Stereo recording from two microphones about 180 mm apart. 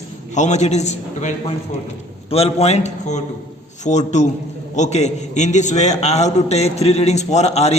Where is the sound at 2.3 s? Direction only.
35° left (ahead or behind).